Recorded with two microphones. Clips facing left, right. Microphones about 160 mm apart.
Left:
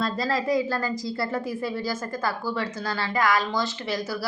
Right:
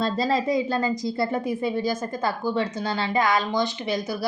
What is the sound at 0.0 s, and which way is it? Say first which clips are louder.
A woman's voice: right 3 dB; 25° right (ahead or behind).